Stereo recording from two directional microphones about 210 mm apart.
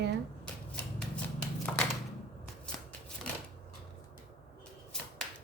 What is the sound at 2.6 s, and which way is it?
Scissors, 5° left (ahead or behind).